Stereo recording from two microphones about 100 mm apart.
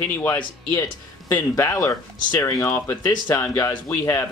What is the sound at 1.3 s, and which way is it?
Speech, 35° left (ahead or behind).